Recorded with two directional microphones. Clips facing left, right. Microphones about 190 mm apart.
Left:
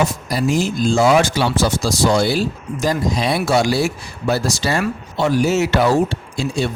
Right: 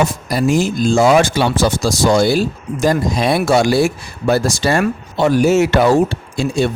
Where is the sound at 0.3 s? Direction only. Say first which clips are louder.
Right 3 dB; 50° right (ahead or behind).